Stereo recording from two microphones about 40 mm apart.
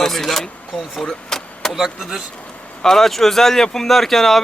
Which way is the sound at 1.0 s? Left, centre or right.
Centre.